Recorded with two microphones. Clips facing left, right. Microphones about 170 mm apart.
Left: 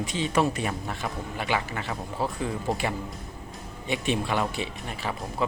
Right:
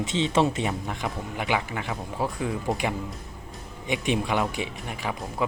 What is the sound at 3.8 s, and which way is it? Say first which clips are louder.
Speech: right 1 dB; 15° right (ahead or behind).